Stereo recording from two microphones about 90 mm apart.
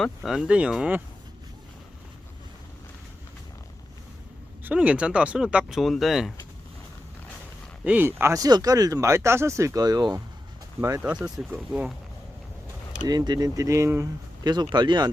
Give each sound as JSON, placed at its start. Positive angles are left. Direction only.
{"t": 0.3, "sound": "speech", "side_deg": -10}
{"t": 4.6, "sound": "speech", "side_deg": -15}
{"t": 7.9, "sound": "speech", "side_deg": -25}
{"t": 8.4, "sound": "speech", "side_deg": -45}
{"t": 10.8, "sound": "speech", "side_deg": -35}
{"t": 11.5, "sound": "speech", "side_deg": -20}
{"t": 13.0, "sound": "speech", "side_deg": -50}
{"t": 14.4, "sound": "speech", "side_deg": -50}